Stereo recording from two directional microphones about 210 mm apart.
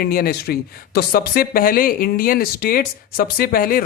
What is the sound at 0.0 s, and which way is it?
Speech, 45° left (ahead or behind).